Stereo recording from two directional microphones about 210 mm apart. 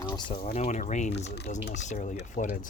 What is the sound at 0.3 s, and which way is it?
Speech, 30° left (ahead or behind).